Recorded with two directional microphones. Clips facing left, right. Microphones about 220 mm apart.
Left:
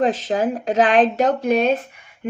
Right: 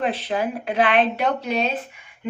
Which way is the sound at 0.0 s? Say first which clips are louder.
Left 4 dB; 45° left (ahead or behind).